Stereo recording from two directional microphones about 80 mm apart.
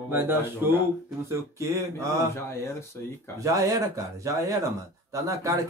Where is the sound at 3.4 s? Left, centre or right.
Right.